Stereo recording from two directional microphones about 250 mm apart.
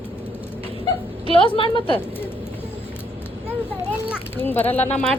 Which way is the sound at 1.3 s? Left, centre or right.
Left.